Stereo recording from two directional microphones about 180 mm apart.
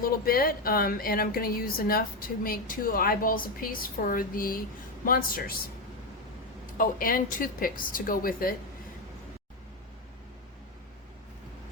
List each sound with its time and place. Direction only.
0.0 s a woman's voice: 55° left (ahead or behind)
6.7 s a woman's voice: 50° left (ahead or behind)